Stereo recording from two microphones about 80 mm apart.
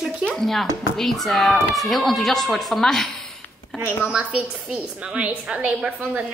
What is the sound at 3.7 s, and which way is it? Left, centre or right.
A woman's voice, centre.